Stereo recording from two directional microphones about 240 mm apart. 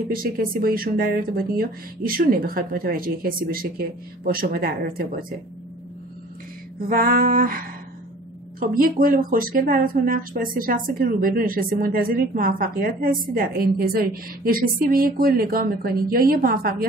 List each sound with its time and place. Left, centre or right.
0.1 s speech: right
6.9 s speech: right